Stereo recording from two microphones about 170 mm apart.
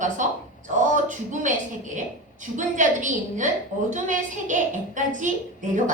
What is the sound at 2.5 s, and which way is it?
A woman's voice, 45° right (ahead or behind).